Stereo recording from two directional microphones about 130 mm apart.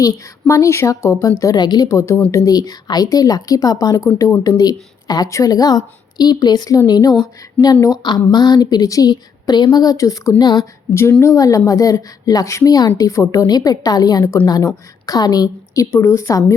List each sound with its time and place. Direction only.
0.0 s a woman's voice: 25° left (ahead or behind)